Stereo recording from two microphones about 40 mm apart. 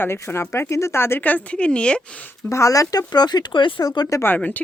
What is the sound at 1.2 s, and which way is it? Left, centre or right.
Speech, left.